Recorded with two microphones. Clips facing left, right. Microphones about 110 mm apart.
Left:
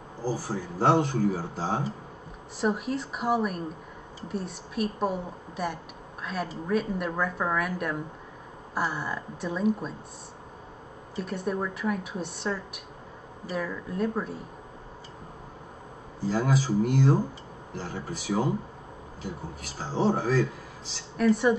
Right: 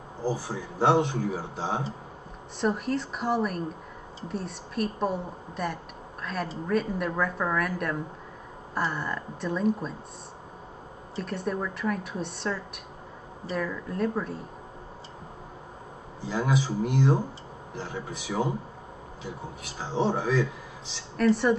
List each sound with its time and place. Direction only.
0.4 s speech: 40° left (ahead or behind)
2.6 s a woman's voice: 5° left (ahead or behind)
11.1 s a woman's voice: centre (ahead or behind)
16.2 s speech: 40° left (ahead or behind)
20.1 s speech: 40° left (ahead or behind)
21.2 s a woman's voice: centre (ahead or behind)